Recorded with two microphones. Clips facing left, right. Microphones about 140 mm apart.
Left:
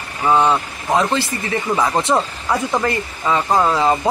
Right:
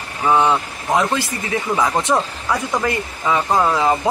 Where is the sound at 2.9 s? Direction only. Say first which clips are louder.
Even; 5° right (ahead or behind).